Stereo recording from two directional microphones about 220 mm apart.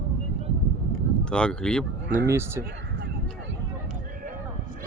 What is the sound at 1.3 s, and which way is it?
Speech, 5° left (ahead or behind).